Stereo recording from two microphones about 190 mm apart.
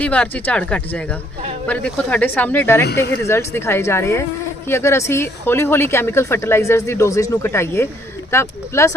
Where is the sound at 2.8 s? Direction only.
60° left (ahead or behind).